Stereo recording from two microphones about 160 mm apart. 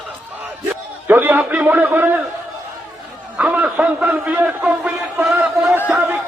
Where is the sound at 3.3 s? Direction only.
10° right (ahead or behind).